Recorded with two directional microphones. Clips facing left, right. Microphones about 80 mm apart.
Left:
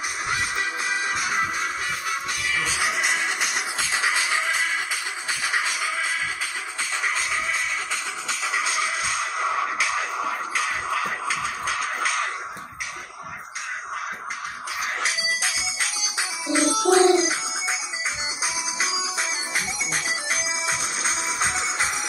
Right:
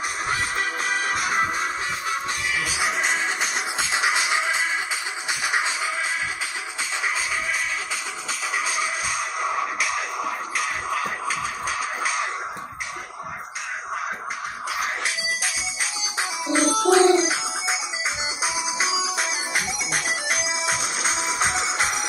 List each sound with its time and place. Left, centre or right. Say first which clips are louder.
0.3 s music: even; right
1.4 s music: right 2 dB; right
8.5 s music: even; centre
16.2 s music: right 1 dB; right
16.9 s music: even; right